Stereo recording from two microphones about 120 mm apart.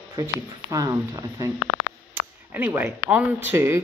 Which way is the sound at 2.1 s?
15° right (ahead or behind).